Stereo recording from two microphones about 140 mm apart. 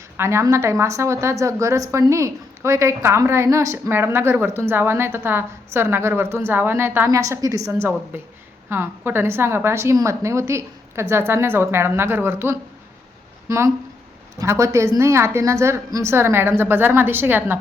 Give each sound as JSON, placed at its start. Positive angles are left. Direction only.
{"t": 0.2, "sound": "a woman's voice", "side_deg": -20}